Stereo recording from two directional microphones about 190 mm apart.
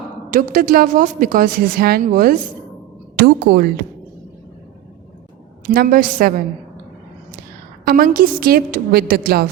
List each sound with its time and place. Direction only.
0.3 s a woman's voice: 45° right (ahead or behind)
5.7 s a woman's voice: 50° right (ahead or behind)
7.9 s a woman's voice: 50° right (ahead or behind)